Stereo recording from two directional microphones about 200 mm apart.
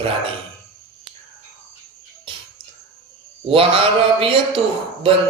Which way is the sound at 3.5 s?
25° right (ahead or behind).